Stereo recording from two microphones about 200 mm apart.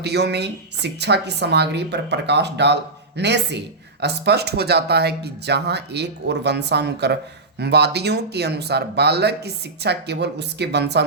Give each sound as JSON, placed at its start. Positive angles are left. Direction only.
{"t": 0.0, "sound": "speech", "side_deg": -55}